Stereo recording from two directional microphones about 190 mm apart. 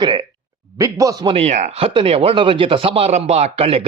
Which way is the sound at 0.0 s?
25° right (ahead or behind).